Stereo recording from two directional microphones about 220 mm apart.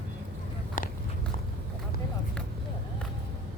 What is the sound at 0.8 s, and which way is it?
Biting, 35° left (ahead or behind).